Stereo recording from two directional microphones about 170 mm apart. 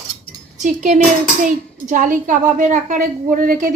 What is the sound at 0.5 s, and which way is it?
A woman's voice, 45° right (ahead or behind).